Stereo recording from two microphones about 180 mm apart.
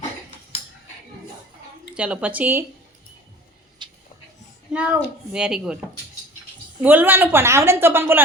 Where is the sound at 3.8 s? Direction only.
25° right (ahead or behind).